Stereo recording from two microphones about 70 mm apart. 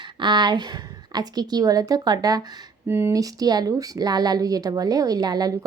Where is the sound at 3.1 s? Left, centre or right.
Right.